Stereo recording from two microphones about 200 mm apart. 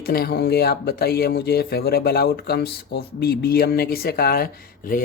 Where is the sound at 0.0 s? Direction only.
50° left (ahead or behind).